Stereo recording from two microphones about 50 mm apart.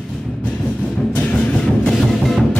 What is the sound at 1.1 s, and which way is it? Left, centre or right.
Music, left.